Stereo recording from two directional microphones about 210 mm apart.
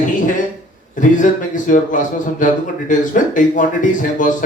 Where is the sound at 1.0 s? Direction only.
40° left (ahead or behind).